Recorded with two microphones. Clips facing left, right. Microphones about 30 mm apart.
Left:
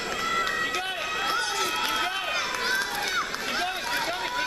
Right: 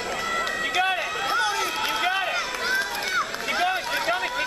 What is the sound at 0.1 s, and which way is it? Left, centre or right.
Run, centre.